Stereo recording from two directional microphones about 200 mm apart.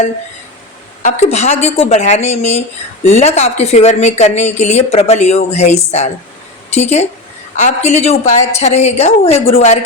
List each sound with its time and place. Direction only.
1.0 s speech: 35° left (ahead or behind)